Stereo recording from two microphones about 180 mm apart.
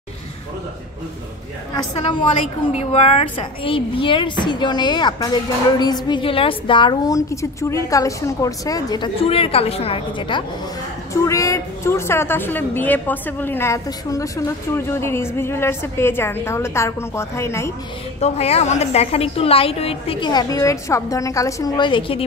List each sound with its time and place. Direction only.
2.7 s a woman's voice: 35° left (ahead or behind); by 17.7 s 15° left (ahead or behind)
18.2 s a woman's voice: 35° left (ahead or behind)